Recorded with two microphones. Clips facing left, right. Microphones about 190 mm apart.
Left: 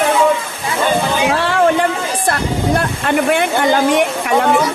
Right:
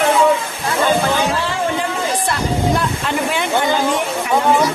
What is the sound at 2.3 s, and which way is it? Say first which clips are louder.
Vehicle: left 3 dB; 55° left (ahead or behind).